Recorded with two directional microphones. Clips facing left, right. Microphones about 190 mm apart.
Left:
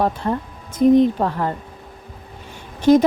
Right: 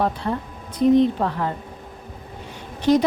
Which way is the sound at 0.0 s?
45° left (ahead or behind).